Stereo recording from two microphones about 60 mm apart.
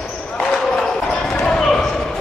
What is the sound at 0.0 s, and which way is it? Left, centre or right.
Basketball bounce, centre.